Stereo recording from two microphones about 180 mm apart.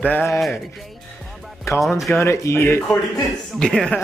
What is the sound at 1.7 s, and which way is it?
A man's voice, 15° left (ahead or behind).